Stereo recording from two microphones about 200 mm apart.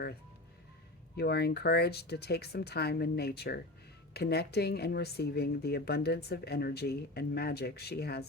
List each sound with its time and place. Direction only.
1.1 s speech: 55° left (ahead or behind)